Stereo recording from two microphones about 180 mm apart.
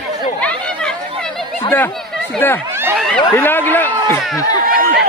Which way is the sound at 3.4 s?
10° left (ahead or behind).